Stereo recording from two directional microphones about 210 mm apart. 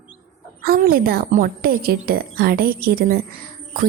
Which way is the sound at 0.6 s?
45° right (ahead or behind).